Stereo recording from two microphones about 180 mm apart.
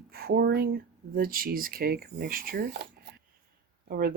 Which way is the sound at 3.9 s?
55° right (ahead or behind).